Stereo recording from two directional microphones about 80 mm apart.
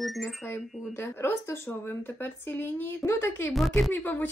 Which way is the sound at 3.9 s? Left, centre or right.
Left.